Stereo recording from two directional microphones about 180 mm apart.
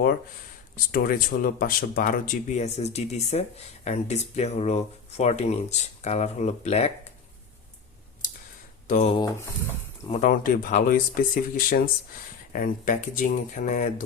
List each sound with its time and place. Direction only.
0.9 s speech: 55° left (ahead or behind); by 7.1 s 35° left (ahead or behind)
8.9 s speech: 35° left (ahead or behind)